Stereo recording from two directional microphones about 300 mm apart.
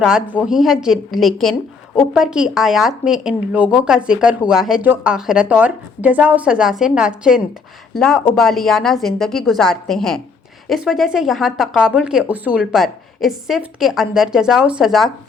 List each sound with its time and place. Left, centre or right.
0.0 s speech: centre